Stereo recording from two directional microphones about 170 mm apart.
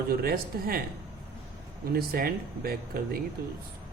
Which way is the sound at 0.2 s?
60° right (ahead or behind).